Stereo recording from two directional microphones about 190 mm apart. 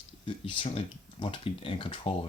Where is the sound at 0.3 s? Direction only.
25° left (ahead or behind).